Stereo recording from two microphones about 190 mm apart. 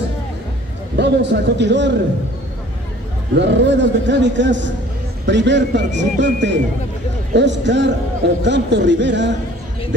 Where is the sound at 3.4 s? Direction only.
70° right (ahead or behind).